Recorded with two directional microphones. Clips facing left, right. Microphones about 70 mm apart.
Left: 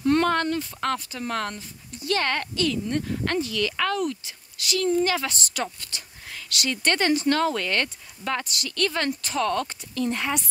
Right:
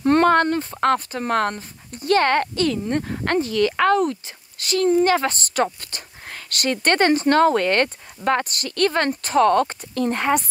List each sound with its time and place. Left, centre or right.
0.0 s speech: right